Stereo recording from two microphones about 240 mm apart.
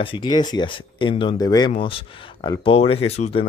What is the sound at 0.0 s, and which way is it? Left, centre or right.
Speech, centre.